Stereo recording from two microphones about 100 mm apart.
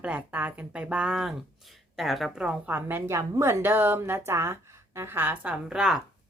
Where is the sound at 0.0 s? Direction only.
15° right (ahead or behind).